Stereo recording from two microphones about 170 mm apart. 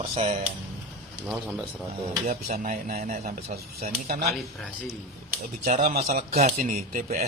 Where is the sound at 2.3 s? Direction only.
50° right (ahead or behind).